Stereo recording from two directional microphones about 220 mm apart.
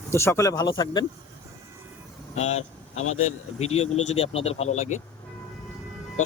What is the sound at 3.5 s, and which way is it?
Speech, 30° left (ahead or behind).